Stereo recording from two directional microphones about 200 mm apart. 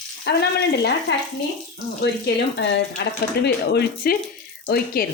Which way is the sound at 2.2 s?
55° left (ahead or behind).